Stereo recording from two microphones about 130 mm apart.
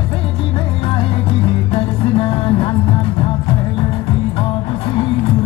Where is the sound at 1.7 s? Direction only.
45° left (ahead or behind).